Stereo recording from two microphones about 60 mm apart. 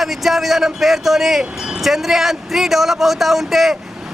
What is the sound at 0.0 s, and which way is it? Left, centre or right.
A man's voice, centre.